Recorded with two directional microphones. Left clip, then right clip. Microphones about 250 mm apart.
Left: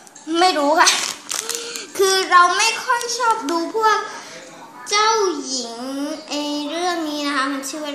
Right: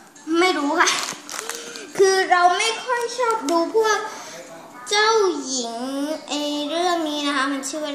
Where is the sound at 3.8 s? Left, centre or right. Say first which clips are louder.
Left 2 dB; centre.